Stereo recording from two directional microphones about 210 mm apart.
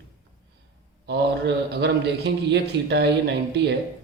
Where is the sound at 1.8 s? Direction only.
50° right (ahead or behind).